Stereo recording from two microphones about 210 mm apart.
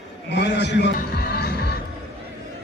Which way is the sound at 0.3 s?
55° left (ahead or behind).